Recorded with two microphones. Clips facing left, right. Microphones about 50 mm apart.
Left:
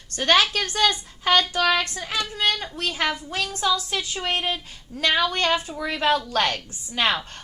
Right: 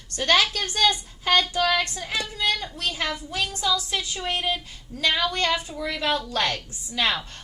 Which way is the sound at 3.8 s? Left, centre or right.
Left.